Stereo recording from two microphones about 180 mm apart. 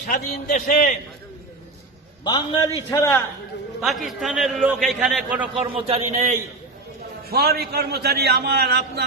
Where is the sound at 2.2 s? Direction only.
20° left (ahead or behind).